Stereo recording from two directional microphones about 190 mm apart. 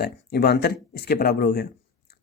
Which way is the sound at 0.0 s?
55° left (ahead or behind).